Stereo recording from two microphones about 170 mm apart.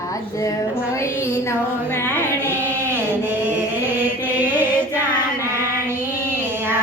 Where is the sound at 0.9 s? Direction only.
15° left (ahead or behind).